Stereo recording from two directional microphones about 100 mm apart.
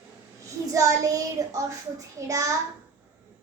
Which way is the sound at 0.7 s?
35° right (ahead or behind).